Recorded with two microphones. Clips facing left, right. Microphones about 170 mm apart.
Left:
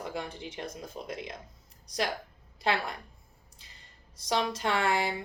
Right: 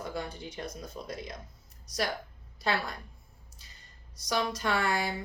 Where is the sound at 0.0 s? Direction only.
25° left (ahead or behind).